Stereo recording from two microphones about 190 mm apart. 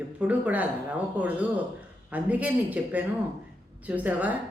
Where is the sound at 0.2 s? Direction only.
10° right (ahead or behind).